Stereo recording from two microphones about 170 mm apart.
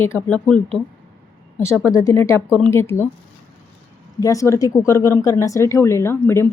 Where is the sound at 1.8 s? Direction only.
20° left (ahead or behind).